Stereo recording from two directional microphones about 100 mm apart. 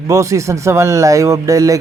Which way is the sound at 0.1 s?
30° right (ahead or behind).